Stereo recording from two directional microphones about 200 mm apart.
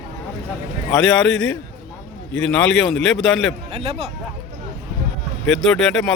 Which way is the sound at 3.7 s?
30° right (ahead or behind).